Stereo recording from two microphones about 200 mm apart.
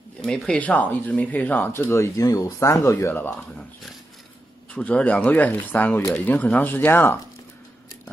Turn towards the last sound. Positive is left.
turn(degrees=10)  # may be behind; listen again after turning